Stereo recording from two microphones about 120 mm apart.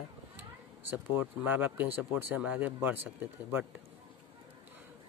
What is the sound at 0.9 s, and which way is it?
Speech, 10° right (ahead or behind).